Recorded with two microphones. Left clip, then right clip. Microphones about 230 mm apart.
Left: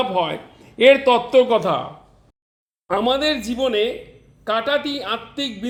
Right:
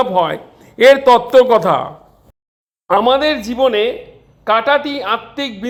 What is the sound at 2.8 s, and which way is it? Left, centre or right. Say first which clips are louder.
A man's voice: right 7 dB; centre.